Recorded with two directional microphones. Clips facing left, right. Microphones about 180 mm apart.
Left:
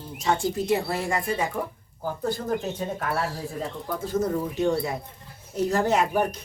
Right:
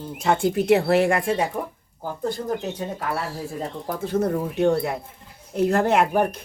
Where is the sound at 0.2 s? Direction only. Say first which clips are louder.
Right 4 dB; 60° right (ahead or behind); by 1.4 s 80° right.